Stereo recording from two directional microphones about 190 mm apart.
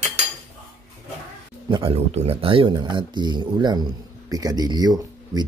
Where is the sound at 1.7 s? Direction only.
30° right (ahead or behind).